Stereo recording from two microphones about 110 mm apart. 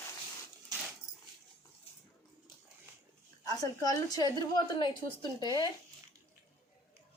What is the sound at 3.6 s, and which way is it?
A woman's voice, 35° left (ahead or behind).